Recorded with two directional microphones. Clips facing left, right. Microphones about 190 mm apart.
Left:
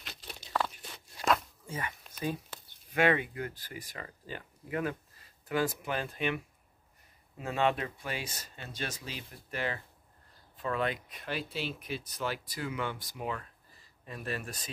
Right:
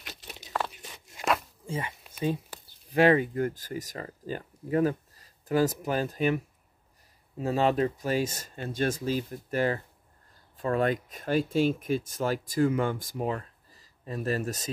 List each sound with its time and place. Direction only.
0.5 s biting: 5° right (ahead or behind)
1.7 s speech: 25° right (ahead or behind)
2.1 s a sound: 25° right (ahead or behind)
2.9 s speech: 35° right (ahead or behind)